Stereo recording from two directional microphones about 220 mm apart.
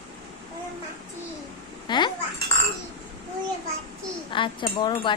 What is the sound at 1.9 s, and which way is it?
Babbling, 20° left (ahead or behind).